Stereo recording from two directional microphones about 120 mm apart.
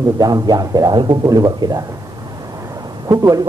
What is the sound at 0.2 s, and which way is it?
A man's voice, 35° right (ahead or behind).